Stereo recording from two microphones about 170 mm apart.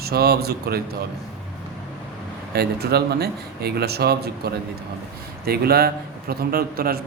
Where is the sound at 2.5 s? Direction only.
70° right (ahead or behind).